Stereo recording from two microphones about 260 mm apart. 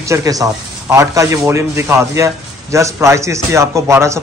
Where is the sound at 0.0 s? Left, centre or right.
Centre.